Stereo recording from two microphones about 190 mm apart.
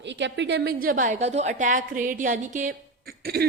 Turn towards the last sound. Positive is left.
turn(degrees=-55)  # may be behind; listen again after turning